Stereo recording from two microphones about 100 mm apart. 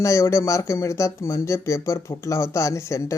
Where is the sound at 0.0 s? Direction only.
30° left (ahead or behind).